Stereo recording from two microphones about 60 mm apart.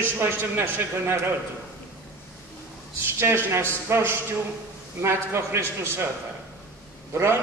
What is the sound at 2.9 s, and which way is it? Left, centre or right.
Speech, right.